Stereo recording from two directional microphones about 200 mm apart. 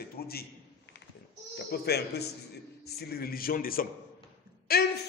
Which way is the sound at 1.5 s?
55° left (ahead or behind).